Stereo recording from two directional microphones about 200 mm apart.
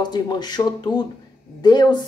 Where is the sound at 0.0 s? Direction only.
20° left (ahead or behind).